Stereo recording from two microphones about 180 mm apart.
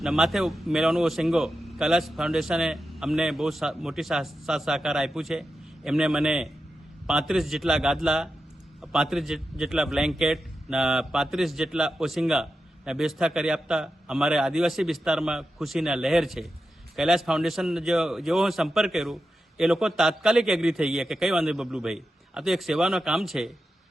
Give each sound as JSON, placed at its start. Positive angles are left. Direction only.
{"t": 0.0, "sound": "a man's voice", "side_deg": 0}